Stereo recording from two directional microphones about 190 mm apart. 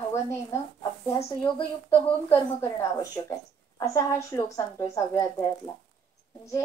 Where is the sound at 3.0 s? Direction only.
20° left (ahead or behind).